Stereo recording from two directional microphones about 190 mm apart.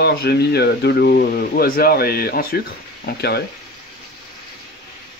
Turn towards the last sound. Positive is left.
turn(degrees=60)  # may be behind; listen again after turning